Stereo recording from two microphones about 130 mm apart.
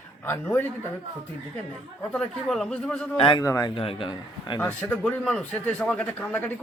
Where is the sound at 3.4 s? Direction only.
25° left (ahead or behind).